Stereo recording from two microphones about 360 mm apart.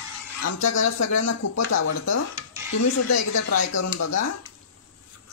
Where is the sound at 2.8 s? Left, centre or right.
Left.